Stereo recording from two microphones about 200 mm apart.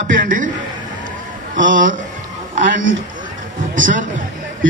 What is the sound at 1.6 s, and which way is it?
Speech, 45° right (ahead or behind).